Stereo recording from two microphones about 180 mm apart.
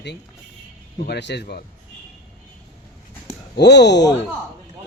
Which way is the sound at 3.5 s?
70° left (ahead or behind).